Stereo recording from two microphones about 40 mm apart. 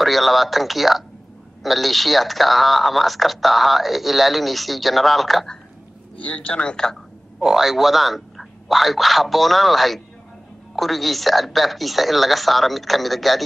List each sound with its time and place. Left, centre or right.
0.0 s speech: centre
6.2 s speech: left
7.3 s speech: centre